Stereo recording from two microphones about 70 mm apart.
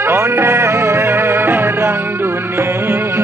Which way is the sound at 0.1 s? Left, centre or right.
Right.